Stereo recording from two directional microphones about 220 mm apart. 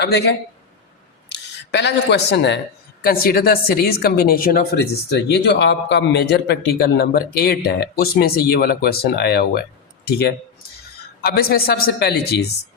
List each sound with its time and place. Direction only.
0.0 s speech: 50° left (ahead or behind)